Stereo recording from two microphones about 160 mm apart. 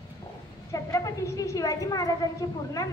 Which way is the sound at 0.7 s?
20° left (ahead or behind).